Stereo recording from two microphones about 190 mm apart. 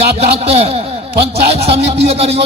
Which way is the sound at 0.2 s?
35° right (ahead or behind).